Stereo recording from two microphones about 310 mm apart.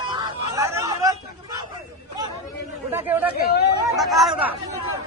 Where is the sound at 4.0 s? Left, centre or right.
Centre.